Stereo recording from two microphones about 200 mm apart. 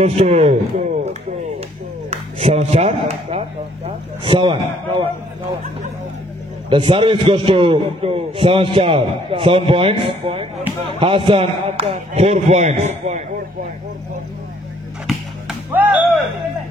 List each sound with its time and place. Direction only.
0.0 s a man's voice: 30° right (ahead or behind)
2.0 s a man's voice: 30° right (ahead or behind)
6.7 s a man's voice: 25° right (ahead or behind)
15.0 s music: 5° right (ahead or behind)